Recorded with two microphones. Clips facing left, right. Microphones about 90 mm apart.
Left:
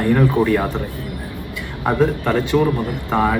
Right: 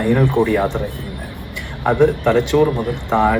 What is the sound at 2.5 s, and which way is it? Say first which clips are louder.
Speech: right 2 dB; 5° left (ahead or behind).